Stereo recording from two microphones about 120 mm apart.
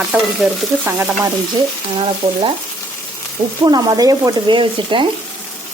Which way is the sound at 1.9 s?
50° right (ahead or behind).